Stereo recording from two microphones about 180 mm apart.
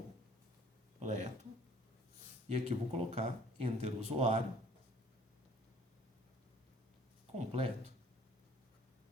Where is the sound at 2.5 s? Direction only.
35° right (ahead or behind).